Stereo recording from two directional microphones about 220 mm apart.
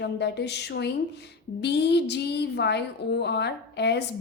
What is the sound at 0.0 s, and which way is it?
A woman's voice, 50° left (ahead or behind).